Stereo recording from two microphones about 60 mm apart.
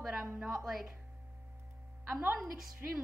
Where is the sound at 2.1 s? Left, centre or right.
Right.